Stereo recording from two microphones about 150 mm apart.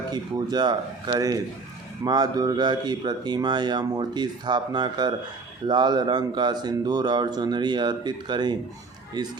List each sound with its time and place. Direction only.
0.1 s speech: 25° right (ahead or behind)